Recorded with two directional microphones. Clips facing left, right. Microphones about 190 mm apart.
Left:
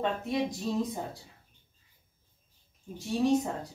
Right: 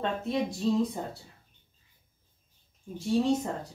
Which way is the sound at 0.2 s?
15° left (ahead or behind).